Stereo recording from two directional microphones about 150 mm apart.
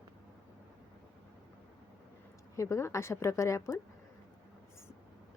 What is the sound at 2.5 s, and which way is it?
A woman's voice, 20° left (ahead or behind).